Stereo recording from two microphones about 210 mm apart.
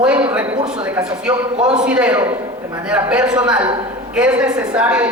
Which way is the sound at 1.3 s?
30° right (ahead or behind).